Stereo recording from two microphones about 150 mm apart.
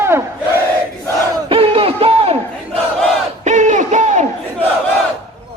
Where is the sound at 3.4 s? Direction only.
55° right (ahead or behind).